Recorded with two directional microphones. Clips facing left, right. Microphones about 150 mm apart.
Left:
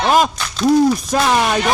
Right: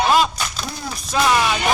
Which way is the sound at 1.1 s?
45° left (ahead or behind).